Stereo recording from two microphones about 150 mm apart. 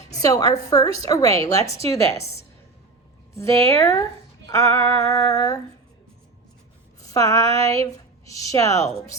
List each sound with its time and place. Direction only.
0.2 s a woman's voice: 25° left (ahead or behind)
2.1 s a woman's voice: 45° left (ahead or behind)
3.3 s a woman's voice: 20° left (ahead or behind)
7.0 s a woman's voice: 20° left (ahead or behind)